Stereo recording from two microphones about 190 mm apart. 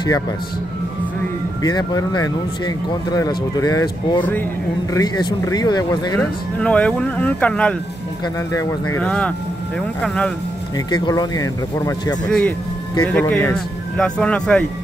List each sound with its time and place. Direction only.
1.6 s speech: 20° left (ahead or behind)
4.2 s speech: 10° left (ahead or behind)
4.9 s speech: 20° left (ahead or behind)
6.1 s speech: 5° left (ahead or behind)
9.0 s speech: 5° left (ahead or behind)
10.9 s speech: 20° left (ahead or behind)
12.3 s speech: centre (ahead or behind)